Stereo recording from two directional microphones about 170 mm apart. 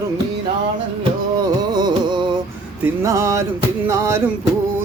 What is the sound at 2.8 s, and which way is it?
Speech, 20° right (ahead or behind).